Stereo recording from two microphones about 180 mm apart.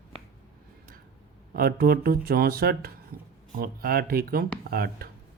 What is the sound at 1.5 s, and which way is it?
Speech, 55° right (ahead or behind).